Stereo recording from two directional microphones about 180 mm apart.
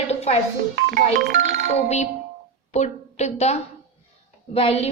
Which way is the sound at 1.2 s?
90° right.